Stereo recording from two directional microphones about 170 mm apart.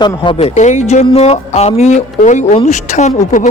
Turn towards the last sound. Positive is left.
turn(degrees=45)  # may be behind; listen again after turning